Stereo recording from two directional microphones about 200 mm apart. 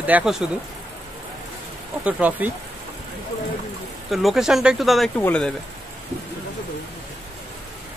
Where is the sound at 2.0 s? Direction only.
5° right (ahead or behind).